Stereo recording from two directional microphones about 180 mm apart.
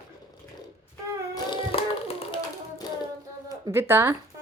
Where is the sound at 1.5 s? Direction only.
30° left (ahead or behind).